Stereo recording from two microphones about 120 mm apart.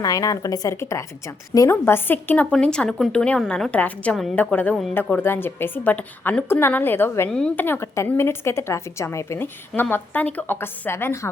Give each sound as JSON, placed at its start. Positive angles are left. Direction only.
{"t": 0.0, "sound": "a woman's voice", "side_deg": 30}
{"t": 7.3, "sound": "a woman's voice", "side_deg": 5}